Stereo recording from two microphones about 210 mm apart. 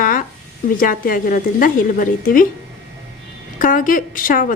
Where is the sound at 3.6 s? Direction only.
40° left (ahead or behind).